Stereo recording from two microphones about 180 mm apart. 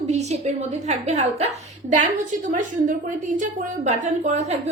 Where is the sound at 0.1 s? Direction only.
35° right (ahead or behind).